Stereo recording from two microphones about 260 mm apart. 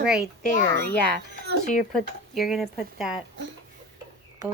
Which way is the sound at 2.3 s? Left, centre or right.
Centre.